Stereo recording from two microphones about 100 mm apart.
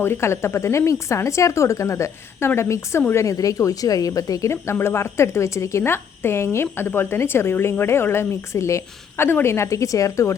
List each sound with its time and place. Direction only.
0.0 s speech: 25° left (ahead or behind)
4.5 s speech: 25° left (ahead or behind)